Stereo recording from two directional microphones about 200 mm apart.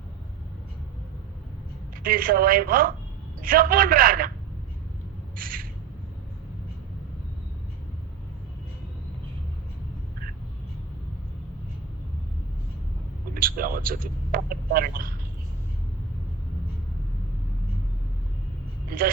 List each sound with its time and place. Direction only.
2.0 s a man's voice: 45° right (ahead or behind)
5.4 s squawk: 45° right (ahead or behind)
13.3 s speech: 45° right (ahead or behind)